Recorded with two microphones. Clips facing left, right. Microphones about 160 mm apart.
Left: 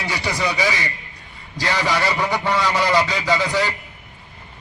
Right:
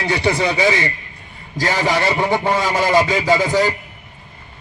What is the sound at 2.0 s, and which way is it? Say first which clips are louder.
Speech: right 4 dB; 25° right (ahead or behind).